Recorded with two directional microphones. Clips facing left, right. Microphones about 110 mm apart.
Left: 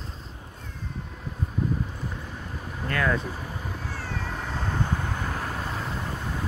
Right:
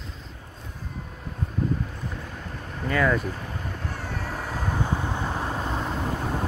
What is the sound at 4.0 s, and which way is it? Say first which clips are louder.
Cat: right 1 dB; 5° right (ahead or behind).